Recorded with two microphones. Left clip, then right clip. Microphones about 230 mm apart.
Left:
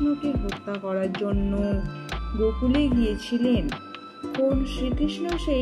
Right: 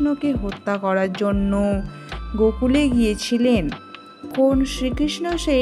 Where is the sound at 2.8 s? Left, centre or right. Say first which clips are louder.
Right 5 dB; right.